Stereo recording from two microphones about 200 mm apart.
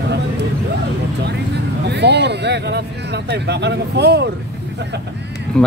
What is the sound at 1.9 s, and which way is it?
Speech, 55° right (ahead or behind).